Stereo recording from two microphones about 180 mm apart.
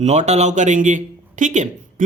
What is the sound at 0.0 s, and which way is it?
A man's voice, 40° right (ahead or behind).